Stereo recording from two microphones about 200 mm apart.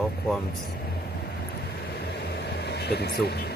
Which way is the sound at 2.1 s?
55° left (ahead or behind).